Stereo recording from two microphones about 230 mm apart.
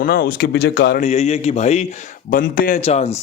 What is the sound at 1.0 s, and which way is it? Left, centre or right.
A man's voice, left.